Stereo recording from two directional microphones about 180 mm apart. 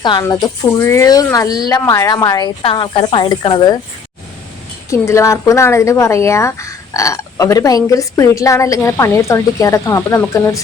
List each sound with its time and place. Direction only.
0.0 s speech: 20° left (ahead or behind)
4.9 s speech: 15° left (ahead or behind)